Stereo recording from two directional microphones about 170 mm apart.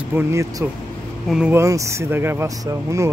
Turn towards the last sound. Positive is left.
turn(degrees=-20)  # may be behind; listen again after turning